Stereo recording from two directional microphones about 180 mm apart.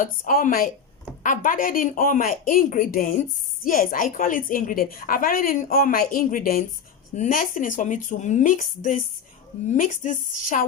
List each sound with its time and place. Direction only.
0.0 s a woman's voice: 50° left (ahead or behind)